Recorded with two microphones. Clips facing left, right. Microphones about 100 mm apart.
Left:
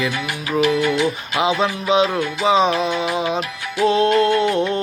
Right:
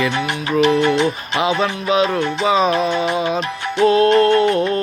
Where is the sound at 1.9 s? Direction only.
25° left (ahead or behind).